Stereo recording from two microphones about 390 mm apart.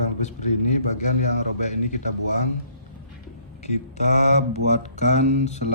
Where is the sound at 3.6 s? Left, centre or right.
Centre.